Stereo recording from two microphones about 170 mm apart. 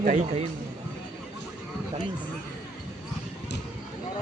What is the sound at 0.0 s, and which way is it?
Speech, 50° right (ahead or behind).